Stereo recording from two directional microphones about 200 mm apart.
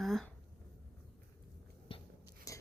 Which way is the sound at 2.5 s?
15° left (ahead or behind).